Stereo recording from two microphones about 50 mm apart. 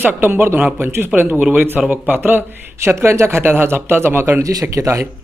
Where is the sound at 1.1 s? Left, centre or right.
Right.